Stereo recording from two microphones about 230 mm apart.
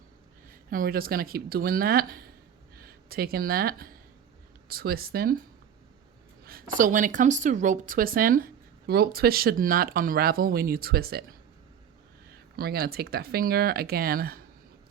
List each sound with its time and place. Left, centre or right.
0.7 s speech: right
6.4 s speech: right
12.5 s speech: right